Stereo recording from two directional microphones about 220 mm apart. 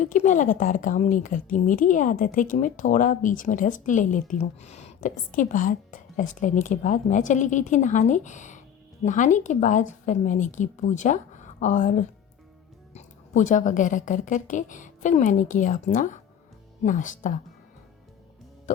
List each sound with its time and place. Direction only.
0.0 s a woman's voice: 35° left (ahead or behind)